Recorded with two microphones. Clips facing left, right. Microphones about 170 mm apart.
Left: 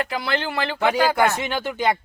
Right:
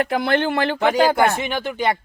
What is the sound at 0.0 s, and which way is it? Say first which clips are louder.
Speech: right 6 dB; 55° right (ahead or behind).